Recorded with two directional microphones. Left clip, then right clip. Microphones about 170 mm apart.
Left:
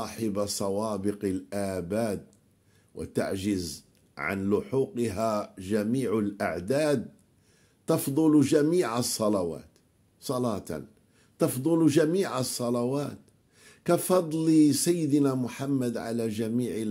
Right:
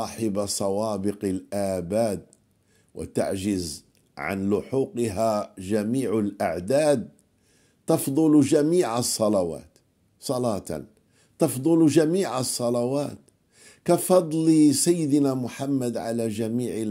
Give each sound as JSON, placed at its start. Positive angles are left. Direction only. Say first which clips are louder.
{"t": 0.0, "sound": "a man's voice", "louder": "right 3 dB", "side_deg": -30}